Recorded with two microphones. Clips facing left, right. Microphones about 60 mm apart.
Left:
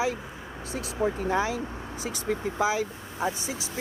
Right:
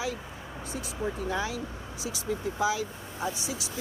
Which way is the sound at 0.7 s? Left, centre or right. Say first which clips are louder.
Left 6 dB; left.